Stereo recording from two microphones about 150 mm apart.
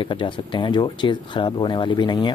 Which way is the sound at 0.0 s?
35° left (ahead or behind).